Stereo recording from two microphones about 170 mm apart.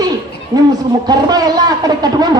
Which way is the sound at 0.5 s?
25° right (ahead or behind).